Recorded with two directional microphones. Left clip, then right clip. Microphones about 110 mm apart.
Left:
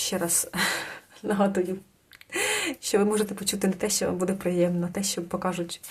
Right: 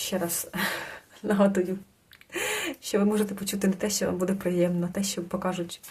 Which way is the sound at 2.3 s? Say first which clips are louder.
Left 3 dB; 30° left (ahead or behind).